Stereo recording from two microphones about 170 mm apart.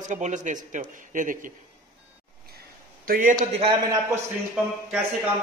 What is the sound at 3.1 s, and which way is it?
Speech, 50° right (ahead or behind).